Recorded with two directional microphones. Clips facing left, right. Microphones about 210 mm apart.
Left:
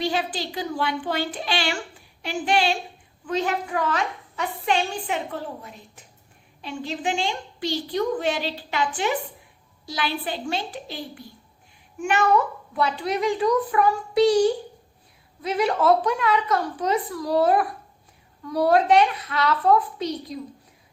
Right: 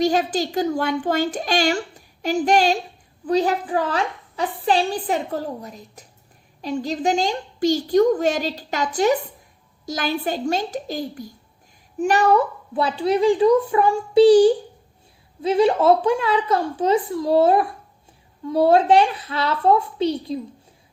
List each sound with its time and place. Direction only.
0.0 s a woman's voice: 45° right (ahead or behind)